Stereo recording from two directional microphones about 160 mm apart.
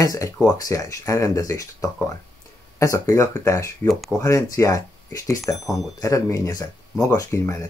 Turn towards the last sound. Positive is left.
turn(degrees=20)  # may be behind; listen again after turning